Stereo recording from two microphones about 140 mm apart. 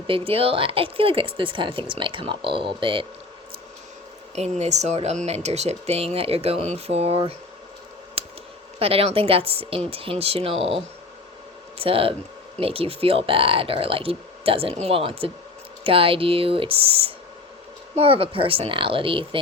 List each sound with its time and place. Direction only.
0.1 s speech: 40° right (ahead or behind)
4.4 s speech: 55° right (ahead or behind)
8.2 s a sound: 45° right (ahead or behind)
8.8 s speech: 45° right (ahead or behind)